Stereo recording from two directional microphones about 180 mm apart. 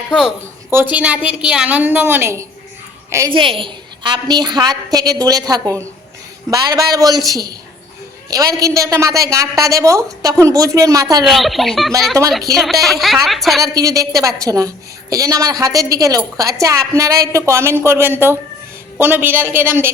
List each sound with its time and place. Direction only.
0.1 s a woman's voice: 5° right (ahead or behind)
3.3 s a woman's voice: 30° right (ahead or behind)
11.2 s speech: centre (ahead or behind)
13.6 s a woman's voice: 20° right (ahead or behind)